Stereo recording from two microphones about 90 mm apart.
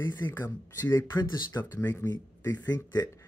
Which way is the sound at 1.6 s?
25° left (ahead or behind).